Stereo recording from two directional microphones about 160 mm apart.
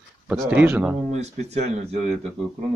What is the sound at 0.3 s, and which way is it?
Speech, 10° right (ahead or behind).